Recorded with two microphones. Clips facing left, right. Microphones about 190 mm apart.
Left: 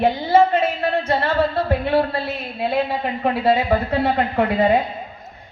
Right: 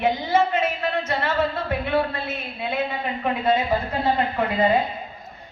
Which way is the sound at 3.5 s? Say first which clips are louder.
Left 4 dB; 65° left (ahead or behind).